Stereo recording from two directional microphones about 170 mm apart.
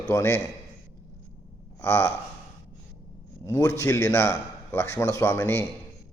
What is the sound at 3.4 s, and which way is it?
A man's voice, 15° left (ahead or behind).